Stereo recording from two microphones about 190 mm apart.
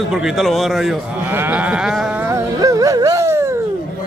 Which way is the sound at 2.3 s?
15° right (ahead or behind).